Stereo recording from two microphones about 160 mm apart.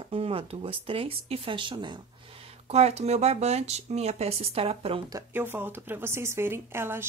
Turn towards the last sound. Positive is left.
turn(degrees=-15)  # may be behind; listen again after turning